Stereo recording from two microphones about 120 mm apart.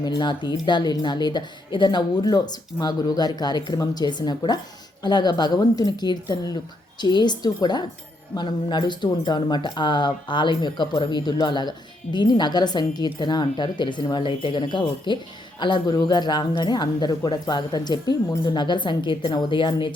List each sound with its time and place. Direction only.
0.0 s speech: 40° left (ahead or behind)